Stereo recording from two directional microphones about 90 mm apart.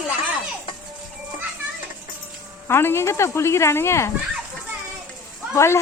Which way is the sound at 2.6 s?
30° left (ahead or behind).